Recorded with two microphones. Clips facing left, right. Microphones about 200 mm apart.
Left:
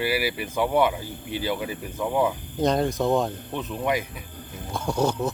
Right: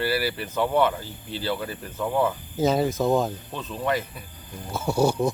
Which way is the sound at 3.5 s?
15° left (ahead or behind).